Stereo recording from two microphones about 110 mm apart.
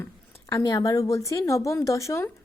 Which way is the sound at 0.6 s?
35° left (ahead or behind).